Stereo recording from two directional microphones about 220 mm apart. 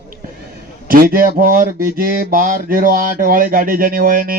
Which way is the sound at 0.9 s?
40° right (ahead or behind).